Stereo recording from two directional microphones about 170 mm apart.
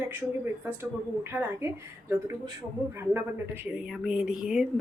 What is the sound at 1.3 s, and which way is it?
Speech, 15° right (ahead or behind).